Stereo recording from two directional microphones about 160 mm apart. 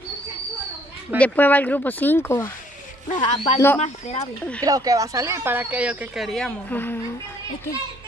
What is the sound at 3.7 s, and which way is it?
Speech, 45° left (ahead or behind).